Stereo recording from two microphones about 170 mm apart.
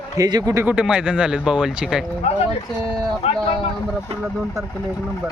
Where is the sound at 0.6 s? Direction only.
5° right (ahead or behind).